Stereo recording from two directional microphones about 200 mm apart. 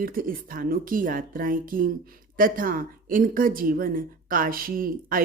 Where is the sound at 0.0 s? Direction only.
45° right (ahead or behind).